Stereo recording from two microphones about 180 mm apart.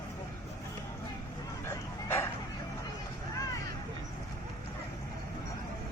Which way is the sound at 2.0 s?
15° left (ahead or behind).